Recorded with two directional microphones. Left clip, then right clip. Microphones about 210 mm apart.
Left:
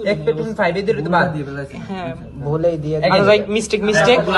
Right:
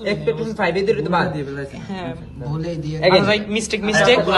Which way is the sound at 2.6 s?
15° left (ahead or behind).